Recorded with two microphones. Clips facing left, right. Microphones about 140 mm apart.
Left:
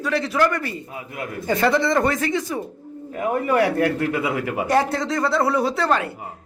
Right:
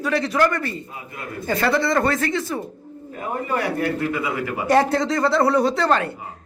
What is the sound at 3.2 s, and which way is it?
A man's voice, 80° left.